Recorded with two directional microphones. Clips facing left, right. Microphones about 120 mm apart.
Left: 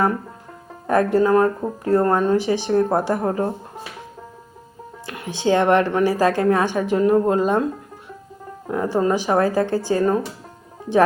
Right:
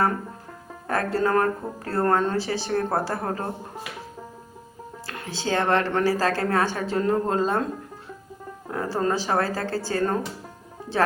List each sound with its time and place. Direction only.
0.9 s speech: 15° left (ahead or behind)
5.0 s speech: 15° left (ahead or behind)
8.6 s speech: 15° left (ahead or behind)